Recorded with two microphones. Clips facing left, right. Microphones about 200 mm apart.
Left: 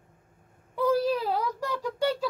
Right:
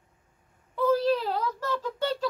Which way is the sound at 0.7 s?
10° left (ahead or behind).